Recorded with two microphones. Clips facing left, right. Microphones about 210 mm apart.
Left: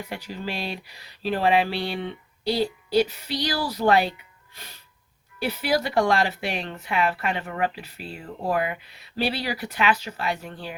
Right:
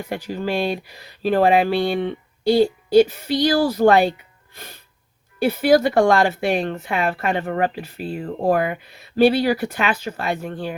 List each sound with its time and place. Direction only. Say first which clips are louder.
0.1 s speech: right 11 dB; 50° right (ahead or behind)
4.5 s music: right 6 dB; 50° right (ahead or behind)
5.4 s speech: right 9 dB; 50° right (ahead or behind)